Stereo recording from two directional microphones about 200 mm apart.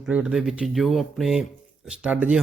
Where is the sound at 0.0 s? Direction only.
5° right (ahead or behind).